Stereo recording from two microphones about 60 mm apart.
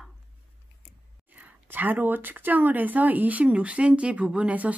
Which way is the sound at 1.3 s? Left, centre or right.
Right.